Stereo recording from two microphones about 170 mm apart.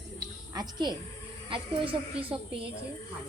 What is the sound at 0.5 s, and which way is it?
A woman's voice, 25° right (ahead or behind).